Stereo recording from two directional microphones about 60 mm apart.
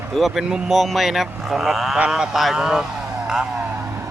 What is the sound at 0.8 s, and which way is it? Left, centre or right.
Speech, centre.